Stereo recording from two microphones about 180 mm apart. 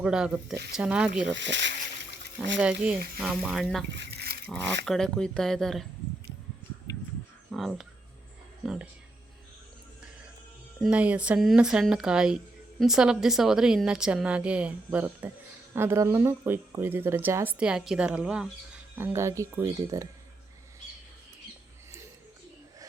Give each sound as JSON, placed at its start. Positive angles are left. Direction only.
{"t": 0.0, "sound": "a woman's voice", "side_deg": -5}
{"t": 1.3, "sound": "speech", "side_deg": -85}
{"t": 2.6, "sound": "a woman's voice", "side_deg": -5}
{"t": 3.9, "sound": "a sound", "side_deg": -70}
{"t": 4.9, "sound": "a woman's voice", "side_deg": 5}
{"t": 7.5, "sound": "a woman's voice", "side_deg": 0}
{"t": 10.8, "sound": "a woman's voice", "side_deg": -5}